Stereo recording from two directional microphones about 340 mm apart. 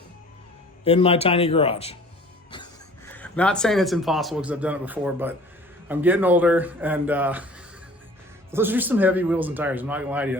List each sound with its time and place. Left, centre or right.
0.9 s speech: centre
3.1 s speech: centre
8.4 s speech: centre